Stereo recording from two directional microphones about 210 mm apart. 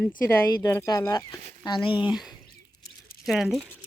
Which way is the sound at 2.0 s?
Centre (ahead or behind).